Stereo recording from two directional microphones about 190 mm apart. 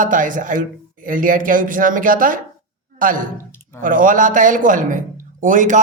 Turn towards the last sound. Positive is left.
turn(degrees=-40)  # may be behind; listen again after turning